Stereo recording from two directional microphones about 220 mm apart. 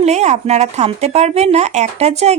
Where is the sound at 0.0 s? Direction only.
30° right (ahead or behind).